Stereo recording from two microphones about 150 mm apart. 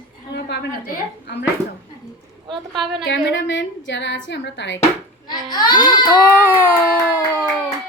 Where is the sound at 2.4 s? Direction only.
30° right (ahead or behind).